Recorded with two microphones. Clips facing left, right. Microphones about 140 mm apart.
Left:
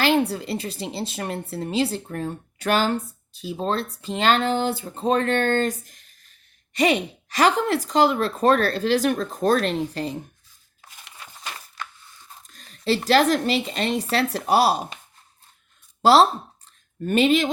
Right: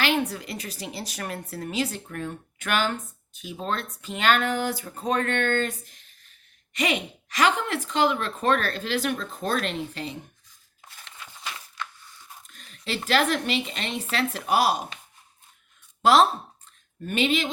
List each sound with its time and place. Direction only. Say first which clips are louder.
0.0 s a woman's voice: left 5 dB; 35° left (ahead or behind)
12.5 s a woman's voice: left 10 dB; 40° left (ahead or behind)
16.0 s speech: left 3 dB; 35° left (ahead or behind)